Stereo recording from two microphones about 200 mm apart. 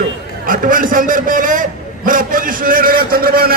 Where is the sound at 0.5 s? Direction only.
45° right (ahead or behind).